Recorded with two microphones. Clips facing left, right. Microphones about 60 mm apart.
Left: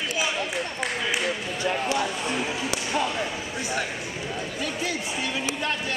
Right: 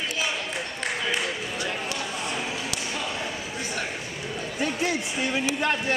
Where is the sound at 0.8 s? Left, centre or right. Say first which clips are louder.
Right 1 dB; centre.